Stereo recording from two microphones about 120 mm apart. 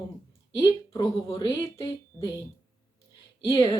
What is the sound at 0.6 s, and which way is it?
A woman's voice, 30° left (ahead or behind).